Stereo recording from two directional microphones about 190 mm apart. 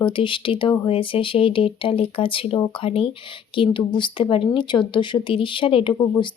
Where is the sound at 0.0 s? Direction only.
25° left (ahead or behind).